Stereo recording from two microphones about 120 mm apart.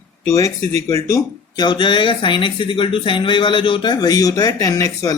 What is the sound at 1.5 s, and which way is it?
Speech, 40° left (ahead or behind).